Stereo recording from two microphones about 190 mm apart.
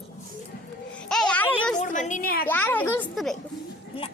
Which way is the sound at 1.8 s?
40° left (ahead or behind).